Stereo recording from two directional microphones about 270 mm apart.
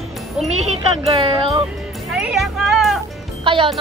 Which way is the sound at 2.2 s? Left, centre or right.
Centre.